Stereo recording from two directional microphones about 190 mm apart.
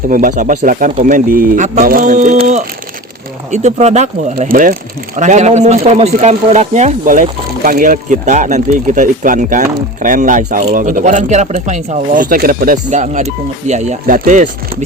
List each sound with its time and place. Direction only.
0.1 s speech: 45° right (ahead or behind)